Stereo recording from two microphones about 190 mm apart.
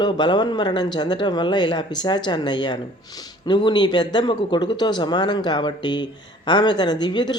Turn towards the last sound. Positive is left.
turn(degrees=25)  # may be behind; listen again after turning